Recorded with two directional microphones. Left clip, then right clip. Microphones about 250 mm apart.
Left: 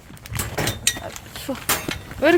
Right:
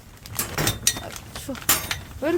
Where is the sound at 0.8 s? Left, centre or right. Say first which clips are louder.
Left 1 dB; right.